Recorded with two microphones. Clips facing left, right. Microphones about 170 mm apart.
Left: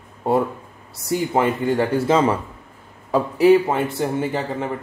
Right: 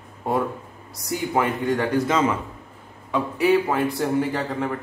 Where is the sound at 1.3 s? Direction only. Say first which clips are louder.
Left 1 dB; 30° left (ahead or behind).